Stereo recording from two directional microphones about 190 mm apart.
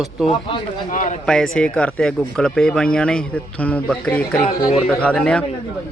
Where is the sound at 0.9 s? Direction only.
40° left (ahead or behind).